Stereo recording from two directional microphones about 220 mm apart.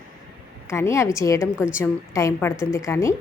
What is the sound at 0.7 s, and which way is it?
A woman's voice, 15° left (ahead or behind).